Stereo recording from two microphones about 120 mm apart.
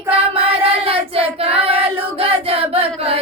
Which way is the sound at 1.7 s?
50° right (ahead or behind).